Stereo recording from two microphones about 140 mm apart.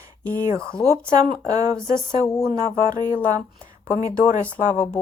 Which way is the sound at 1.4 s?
25° right (ahead or behind).